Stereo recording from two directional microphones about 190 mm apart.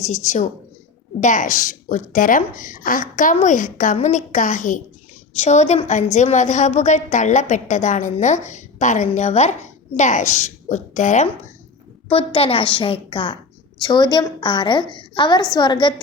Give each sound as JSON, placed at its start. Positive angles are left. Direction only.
{"t": 0.1, "sound": "a woman's voice", "side_deg": 40}